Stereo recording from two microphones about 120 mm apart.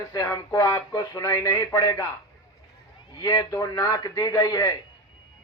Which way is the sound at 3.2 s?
30° left (ahead or behind).